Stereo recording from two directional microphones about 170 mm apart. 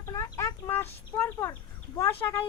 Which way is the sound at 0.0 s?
15° left (ahead or behind).